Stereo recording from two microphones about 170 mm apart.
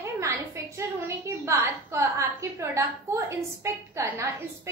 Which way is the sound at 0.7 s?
15° right (ahead or behind).